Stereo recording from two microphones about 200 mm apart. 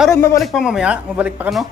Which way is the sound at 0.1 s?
15° left (ahead or behind).